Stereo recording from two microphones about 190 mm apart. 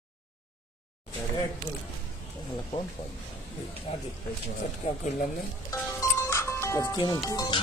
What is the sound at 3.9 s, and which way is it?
Speech, 35° left (ahead or behind).